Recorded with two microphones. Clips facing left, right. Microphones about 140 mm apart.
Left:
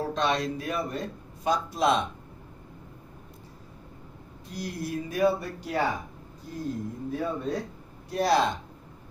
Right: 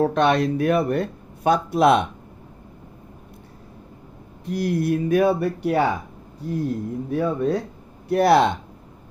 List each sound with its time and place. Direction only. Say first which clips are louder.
0.0 s speech: right 9 dB; 60° right (ahead or behind)
4.5 s speech: right 12 dB; 60° right (ahead or behind)